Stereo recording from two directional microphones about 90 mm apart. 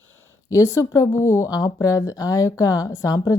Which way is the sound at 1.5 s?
45° left (ahead or behind).